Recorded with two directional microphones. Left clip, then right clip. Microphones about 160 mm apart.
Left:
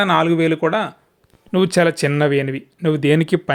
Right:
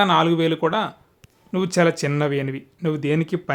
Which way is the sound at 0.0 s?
20° left (ahead or behind).